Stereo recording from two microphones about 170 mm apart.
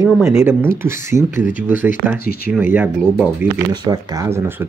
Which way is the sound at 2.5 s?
10° right (ahead or behind).